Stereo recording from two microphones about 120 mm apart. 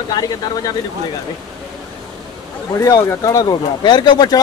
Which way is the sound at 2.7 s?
25° left (ahead or behind).